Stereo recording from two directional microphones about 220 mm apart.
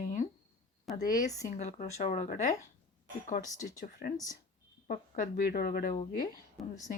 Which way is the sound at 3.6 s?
40° left (ahead or behind).